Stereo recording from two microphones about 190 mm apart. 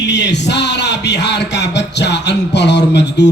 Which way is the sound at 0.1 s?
65° left (ahead or behind).